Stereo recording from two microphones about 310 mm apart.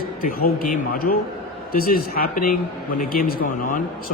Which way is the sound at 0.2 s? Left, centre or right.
Left.